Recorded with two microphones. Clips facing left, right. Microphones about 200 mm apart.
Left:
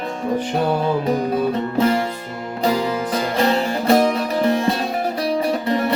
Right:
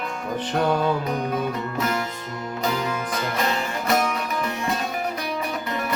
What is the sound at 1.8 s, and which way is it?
Music, 30° left (ahead or behind).